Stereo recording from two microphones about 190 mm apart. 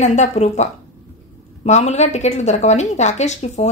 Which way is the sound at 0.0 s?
35° left (ahead or behind).